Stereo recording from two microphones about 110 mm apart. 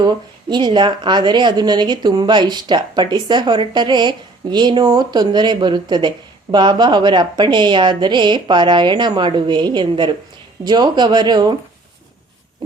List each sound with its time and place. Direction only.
0.0 s speech: 45° right (ahead or behind)